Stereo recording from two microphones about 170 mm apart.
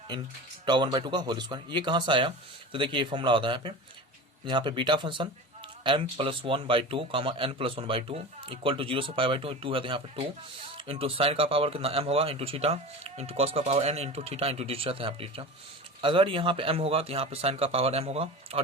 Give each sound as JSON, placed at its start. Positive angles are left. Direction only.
{"t": 0.6, "sound": "speech", "side_deg": -25}